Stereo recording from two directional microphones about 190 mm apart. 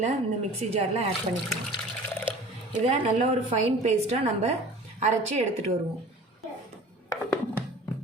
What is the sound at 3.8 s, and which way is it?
A woman's voice, 35° right (ahead or behind).